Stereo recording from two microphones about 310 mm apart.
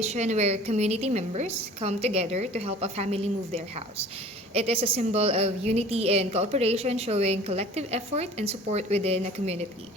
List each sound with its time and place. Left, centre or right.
0.0 s a woman's voice: right